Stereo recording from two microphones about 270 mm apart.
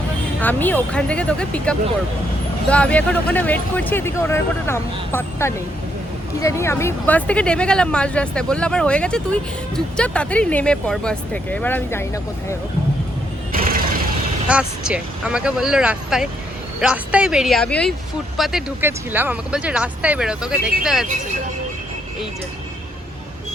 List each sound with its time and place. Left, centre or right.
0.4 s speech: centre
13.5 s vehicle: right
14.4 s speech: centre